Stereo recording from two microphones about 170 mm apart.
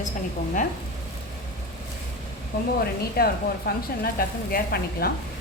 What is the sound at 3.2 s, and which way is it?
Speech, 65° left (ahead or behind).